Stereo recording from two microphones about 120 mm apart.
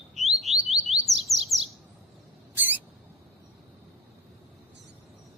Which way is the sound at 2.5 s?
15° right (ahead or behind).